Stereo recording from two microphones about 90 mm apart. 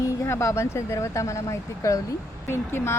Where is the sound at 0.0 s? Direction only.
35° left (ahead or behind).